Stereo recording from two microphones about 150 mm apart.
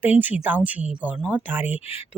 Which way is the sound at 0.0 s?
10° right (ahead or behind).